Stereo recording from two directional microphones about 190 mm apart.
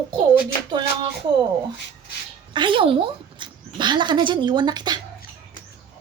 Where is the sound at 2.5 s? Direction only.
25° right (ahead or behind).